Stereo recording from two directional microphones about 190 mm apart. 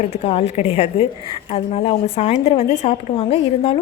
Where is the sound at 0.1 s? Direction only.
30° left (ahead or behind).